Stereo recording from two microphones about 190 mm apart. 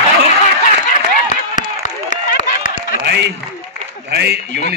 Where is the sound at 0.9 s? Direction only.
40° left (ahead or behind).